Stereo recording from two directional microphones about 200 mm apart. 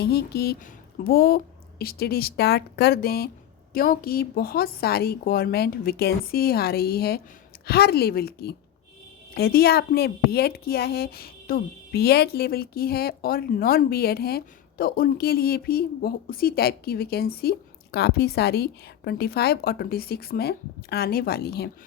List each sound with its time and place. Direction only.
0.0 s a woman's voice: 55° left (ahead or behind)